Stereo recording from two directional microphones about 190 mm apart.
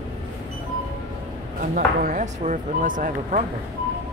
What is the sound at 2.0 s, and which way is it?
Speech, 40° right (ahead or behind).